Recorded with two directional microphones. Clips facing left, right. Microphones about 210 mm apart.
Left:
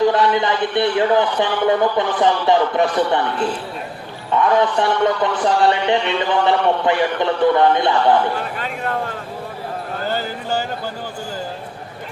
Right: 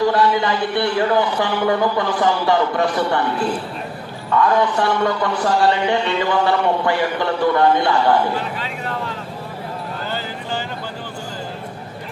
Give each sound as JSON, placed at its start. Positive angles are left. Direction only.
{"t": 0.0, "sound": "a man's voice", "side_deg": 20}
{"t": 4.3, "sound": "a man's voice", "side_deg": 20}
{"t": 8.5, "sound": "a sound", "side_deg": 50}
{"t": 10.0, "sound": "clip-clop", "side_deg": 45}